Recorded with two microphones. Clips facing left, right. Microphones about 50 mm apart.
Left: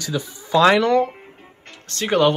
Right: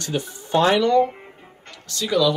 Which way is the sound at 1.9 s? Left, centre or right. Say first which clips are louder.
Left 2 dB; left.